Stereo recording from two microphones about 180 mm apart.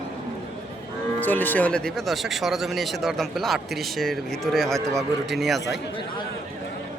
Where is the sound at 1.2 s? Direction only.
10° left (ahead or behind).